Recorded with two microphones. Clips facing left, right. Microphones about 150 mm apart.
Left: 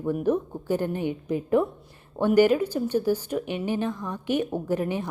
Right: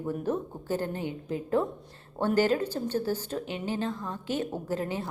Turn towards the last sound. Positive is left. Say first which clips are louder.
# left 5 dB
turn(degrees=15)  # may be behind; listen again after turning